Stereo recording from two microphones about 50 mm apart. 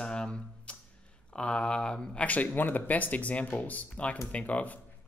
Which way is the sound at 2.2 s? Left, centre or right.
Left.